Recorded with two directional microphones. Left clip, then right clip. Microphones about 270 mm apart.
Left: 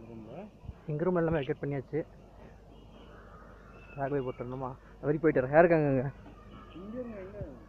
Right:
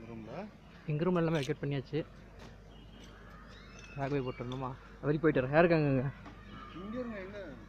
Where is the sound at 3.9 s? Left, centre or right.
Right.